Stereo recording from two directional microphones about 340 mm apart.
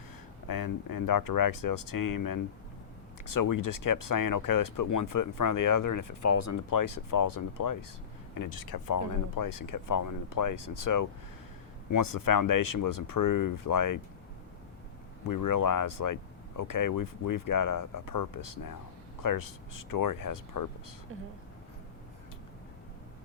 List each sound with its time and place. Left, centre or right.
0.4 s speech: left
8.4 s speech: left
15.3 s speech: left